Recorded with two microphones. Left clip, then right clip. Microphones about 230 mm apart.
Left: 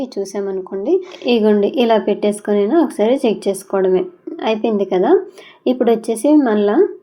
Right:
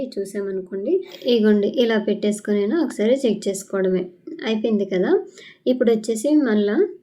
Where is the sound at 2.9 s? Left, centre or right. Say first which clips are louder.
Left 4 dB; left.